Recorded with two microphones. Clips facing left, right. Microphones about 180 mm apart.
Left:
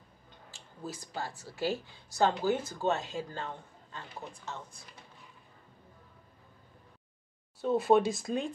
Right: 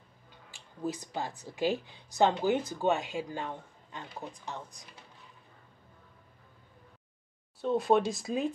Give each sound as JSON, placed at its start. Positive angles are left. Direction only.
{"t": 0.5, "sound": "speech", "side_deg": -20}
{"t": 7.6, "sound": "speech", "side_deg": 5}